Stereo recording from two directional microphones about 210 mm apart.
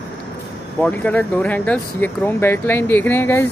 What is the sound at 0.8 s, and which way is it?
Speech, 5° left (ahead or behind).